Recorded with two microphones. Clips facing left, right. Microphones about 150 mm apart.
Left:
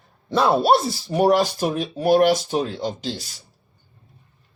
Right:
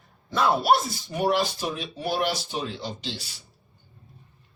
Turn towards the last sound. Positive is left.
turn(degrees=40)  # may be behind; listen again after turning